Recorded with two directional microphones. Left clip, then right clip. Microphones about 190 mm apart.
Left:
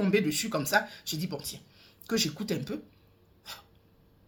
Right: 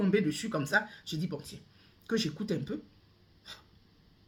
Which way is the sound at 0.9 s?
55° left (ahead or behind).